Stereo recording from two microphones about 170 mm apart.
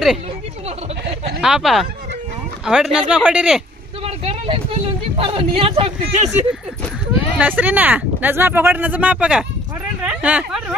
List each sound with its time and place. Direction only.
1.4 s speech: 5° right (ahead or behind)
4.0 s vehicle: 35° right (ahead or behind)
5.1 s speech: 35° right (ahead or behind)
7.3 s speech: 10° right (ahead or behind)